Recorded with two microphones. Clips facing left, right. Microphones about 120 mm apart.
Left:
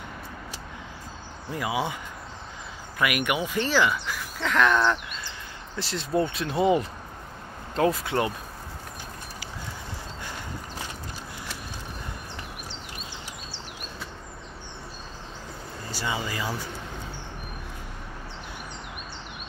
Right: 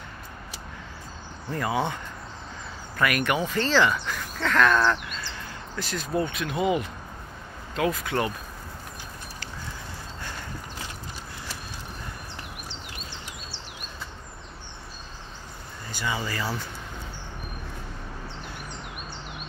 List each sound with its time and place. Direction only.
1.5 s speech: 10° left (ahead or behind)
3.0 s speech: 10° left (ahead or behind)
5.8 s speech: 25° left (ahead or behind)
15.9 s a sound: 35° left (ahead or behind)
16.3 s speech: 15° left (ahead or behind)